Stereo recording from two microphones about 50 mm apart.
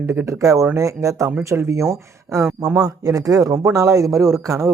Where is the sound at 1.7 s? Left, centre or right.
Right.